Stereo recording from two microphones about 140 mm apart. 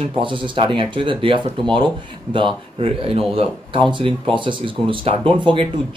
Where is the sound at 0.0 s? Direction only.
35° right (ahead or behind).